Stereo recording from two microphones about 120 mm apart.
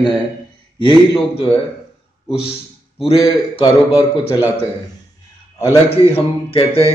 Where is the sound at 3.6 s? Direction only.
40° left (ahead or behind).